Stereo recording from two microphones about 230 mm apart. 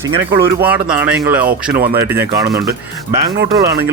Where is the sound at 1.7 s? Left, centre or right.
Right.